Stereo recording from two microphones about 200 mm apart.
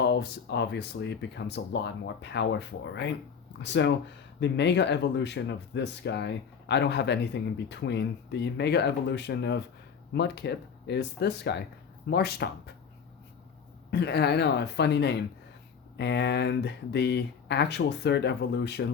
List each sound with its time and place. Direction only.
0.0 s speech: 55° left (ahead or behind)
13.9 s speech: 55° left (ahead or behind)